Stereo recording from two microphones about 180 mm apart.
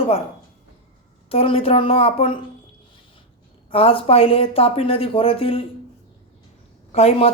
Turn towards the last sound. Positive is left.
turn(degrees=35)  # may be behind; listen again after turning